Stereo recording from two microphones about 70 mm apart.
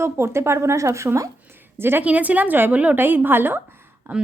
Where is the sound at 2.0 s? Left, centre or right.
Right.